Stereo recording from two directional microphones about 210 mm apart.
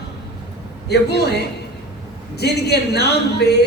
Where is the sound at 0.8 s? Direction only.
50° left (ahead or behind).